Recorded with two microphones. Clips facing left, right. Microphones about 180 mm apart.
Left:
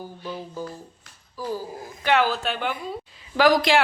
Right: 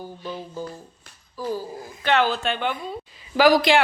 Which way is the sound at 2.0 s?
10° left (ahead or behind).